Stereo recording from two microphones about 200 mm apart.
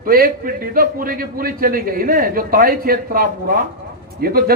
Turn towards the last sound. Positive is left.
turn(degrees=-50)  # may be behind; listen again after turning